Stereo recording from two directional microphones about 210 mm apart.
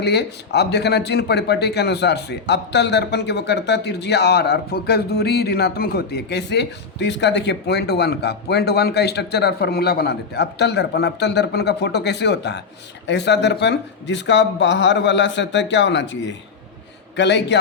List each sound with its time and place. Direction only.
0.0 s speech: 50° left (ahead or behind)